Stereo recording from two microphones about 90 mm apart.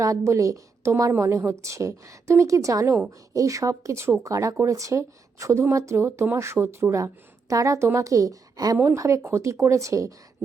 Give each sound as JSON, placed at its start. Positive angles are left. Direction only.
{"t": 0.0, "sound": "a woman's voice", "side_deg": -40}
{"t": 6.1, "sound": "a woman's voice", "side_deg": -20}
{"t": 6.3, "sound": "speech", "side_deg": -30}
{"t": 9.0, "sound": "speech", "side_deg": -35}